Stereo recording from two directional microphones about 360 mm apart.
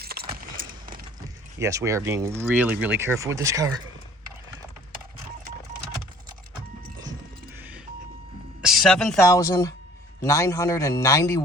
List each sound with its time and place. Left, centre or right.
0.0 s keys jangling: right
0.5 s a sound: right
1.5 s speech: centre
8.6 s a man's voice: centre